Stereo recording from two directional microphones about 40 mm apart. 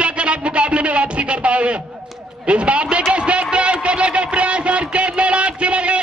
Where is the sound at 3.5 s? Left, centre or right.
Right.